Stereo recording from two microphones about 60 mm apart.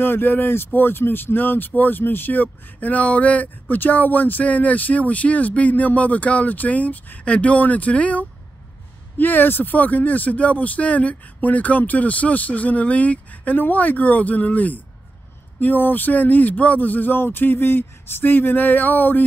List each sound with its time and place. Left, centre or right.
0.0 s speech: left